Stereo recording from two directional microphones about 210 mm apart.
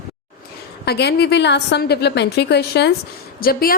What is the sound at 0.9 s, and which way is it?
A woman's voice, 50° left (ahead or behind).